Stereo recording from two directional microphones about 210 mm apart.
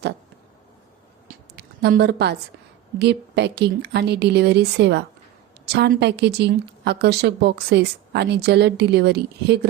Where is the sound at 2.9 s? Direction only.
55° right (ahead or behind).